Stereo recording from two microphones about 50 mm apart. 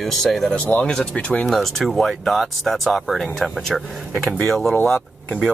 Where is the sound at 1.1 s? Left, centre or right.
Left.